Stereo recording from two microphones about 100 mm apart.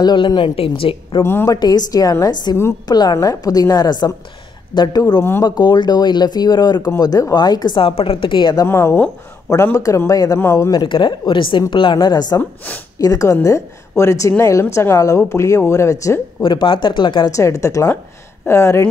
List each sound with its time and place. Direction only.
0.0 s a woman's voice: 45° left (ahead or behind); by 1.2 s 65° left (ahead or behind)
1.2 s speech: 25° left (ahead or behind)
1.5 s a woman's voice: 40° left (ahead or behind)
7.9 s a woman's voice: 70° left (ahead or behind); by 8.6 s 50° left (ahead or behind)
8.6 s a woman's voice: 25° left (ahead or behind)
10.4 s speech: 25° left (ahead or behind)
10.7 s a woman's voice: 50° left (ahead or behind)
12.4 s speech: 20° left (ahead or behind)
13.0 s a woman's voice: 35° left (ahead or behind)
16.4 s speech: 55° left (ahead or behind)
17.3 s a woman's voice: 30° left (ahead or behind)